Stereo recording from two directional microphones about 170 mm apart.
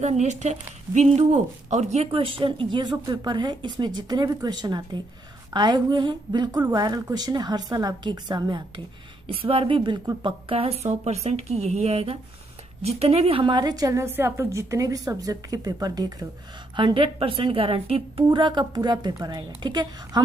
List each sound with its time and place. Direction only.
0.0 s a woman's voice: 40° right (ahead or behind); by 20.2 s 25° right (ahead or behind)